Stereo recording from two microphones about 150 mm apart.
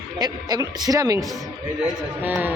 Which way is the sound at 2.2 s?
10° right (ahead or behind).